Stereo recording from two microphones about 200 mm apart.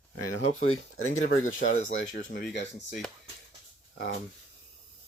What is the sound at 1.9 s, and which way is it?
Speech, 65° left (ahead or behind).